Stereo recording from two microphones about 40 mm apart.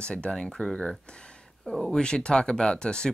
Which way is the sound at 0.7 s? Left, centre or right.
Left.